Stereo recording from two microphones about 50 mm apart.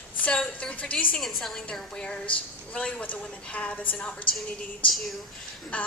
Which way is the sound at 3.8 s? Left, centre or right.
Left.